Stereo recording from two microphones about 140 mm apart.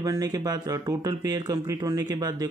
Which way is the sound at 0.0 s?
25° right (ahead or behind).